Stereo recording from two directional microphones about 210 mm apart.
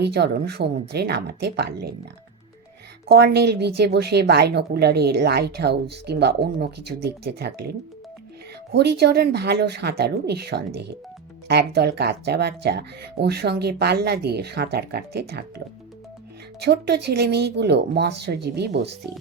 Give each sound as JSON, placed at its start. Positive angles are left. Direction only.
{"t": 0.0, "sound": "speech", "side_deg": -50}
{"t": 3.1, "sound": "speech", "side_deg": -50}